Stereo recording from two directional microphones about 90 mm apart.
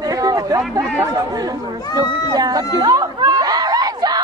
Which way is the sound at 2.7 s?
45° right (ahead or behind).